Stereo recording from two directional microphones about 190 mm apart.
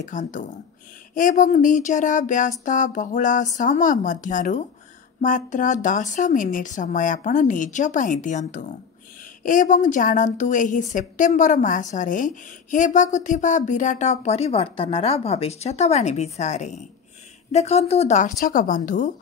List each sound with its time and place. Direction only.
0.0 s speech: 40° left (ahead or behind)